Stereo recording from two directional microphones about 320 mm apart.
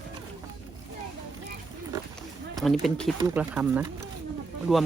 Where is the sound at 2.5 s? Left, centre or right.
Centre.